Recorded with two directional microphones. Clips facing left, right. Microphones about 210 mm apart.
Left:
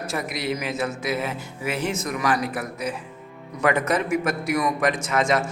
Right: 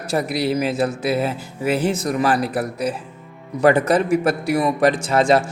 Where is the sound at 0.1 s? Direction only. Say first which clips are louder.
Right 8 dB; 35° right (ahead or behind).